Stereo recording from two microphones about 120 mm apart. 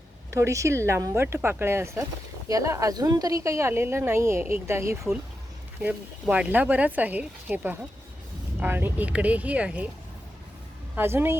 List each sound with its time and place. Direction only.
0.3 s a woman's voice: 25° right (ahead or behind)
10.9 s a woman's voice: 20° right (ahead or behind)